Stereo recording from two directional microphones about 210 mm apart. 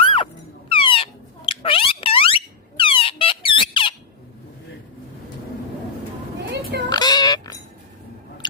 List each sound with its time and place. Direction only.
0.0 s music: 25° left (ahead or behind)
0.7 s a sound: 25° left (ahead or behind)
6.5 s children playing: 55° right (ahead or behind)
6.9 s oink: 20° left (ahead or behind)